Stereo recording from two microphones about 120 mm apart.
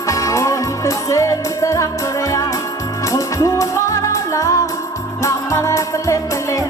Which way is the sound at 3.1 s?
25° left (ahead or behind).